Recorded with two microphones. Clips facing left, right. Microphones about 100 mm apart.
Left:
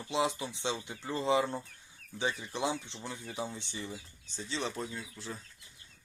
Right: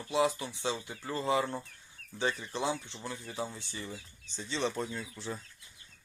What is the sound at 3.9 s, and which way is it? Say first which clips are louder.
Speech: even; centre (ahead or behind).